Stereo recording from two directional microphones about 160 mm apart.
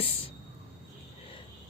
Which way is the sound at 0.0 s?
35° left (ahead or behind).